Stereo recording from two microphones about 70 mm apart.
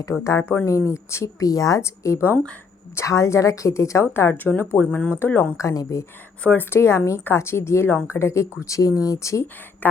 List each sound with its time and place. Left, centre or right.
0.3 s speech: left
1.8 s speech: left
4.1 s speech: left
5.5 s speech: left
6.6 s speech: left
9.8 s a sound: left